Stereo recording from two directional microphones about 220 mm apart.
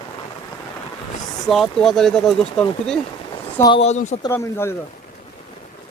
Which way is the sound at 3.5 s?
20° left (ahead or behind).